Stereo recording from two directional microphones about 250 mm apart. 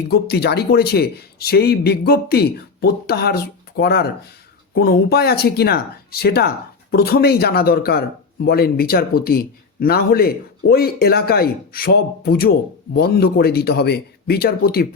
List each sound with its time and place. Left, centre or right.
0.1 s a man's voice: left